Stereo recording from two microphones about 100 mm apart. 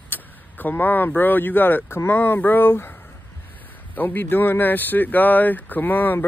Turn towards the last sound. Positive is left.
turn(degrees=20)  # may be behind; listen again after turning